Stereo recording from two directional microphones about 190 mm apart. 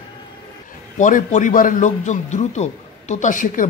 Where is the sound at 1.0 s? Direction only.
40° left (ahead or behind).